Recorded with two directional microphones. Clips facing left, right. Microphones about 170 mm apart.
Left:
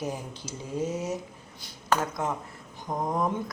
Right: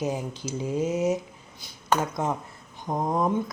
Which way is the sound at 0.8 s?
90° right.